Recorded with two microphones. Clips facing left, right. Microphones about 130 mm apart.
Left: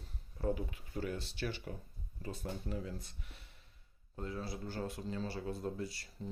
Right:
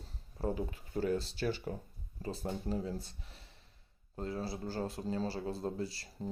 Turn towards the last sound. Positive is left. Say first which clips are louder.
# right 3 dB
turn(degrees=-35)  # may be behind; listen again after turning